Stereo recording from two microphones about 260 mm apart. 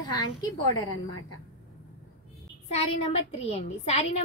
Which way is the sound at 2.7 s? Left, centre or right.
Left.